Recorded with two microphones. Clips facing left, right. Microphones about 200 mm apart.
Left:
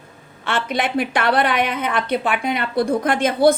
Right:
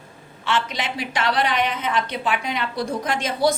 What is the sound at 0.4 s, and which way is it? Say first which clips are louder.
A woman's voice: left 3 dB; 55° left (ahead or behind).